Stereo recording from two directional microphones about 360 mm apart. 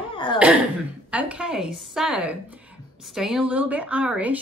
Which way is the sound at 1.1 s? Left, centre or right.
Centre.